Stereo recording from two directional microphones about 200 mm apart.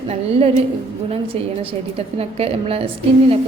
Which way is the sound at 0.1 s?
30° right (ahead or behind).